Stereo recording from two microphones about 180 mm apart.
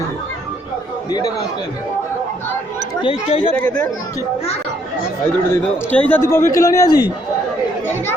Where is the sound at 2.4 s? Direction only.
25° left (ahead or behind).